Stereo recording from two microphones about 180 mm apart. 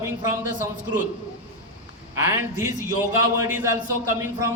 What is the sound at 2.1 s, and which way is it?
A man's voice, 15° right (ahead or behind).